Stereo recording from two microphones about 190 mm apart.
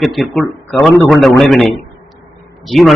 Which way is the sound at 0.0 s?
Centre (ahead or behind).